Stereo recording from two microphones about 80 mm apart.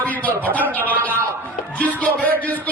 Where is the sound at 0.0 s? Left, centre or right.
Centre.